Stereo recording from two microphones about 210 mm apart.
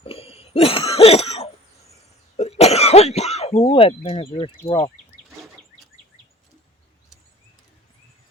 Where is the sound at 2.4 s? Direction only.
30° left (ahead or behind).